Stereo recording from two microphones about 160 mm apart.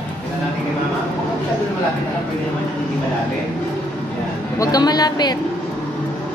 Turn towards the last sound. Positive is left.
turn(degrees=25)  # may be behind; listen again after turning